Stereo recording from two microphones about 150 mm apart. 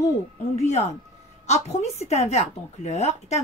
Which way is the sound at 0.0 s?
50° left (ahead or behind).